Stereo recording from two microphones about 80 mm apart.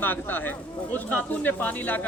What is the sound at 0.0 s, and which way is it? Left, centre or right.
A man's voice, left.